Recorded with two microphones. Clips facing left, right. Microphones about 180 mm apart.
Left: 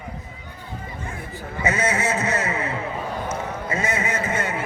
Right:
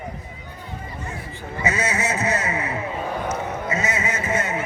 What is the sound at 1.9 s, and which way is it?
Speech, 30° left (ahead or behind).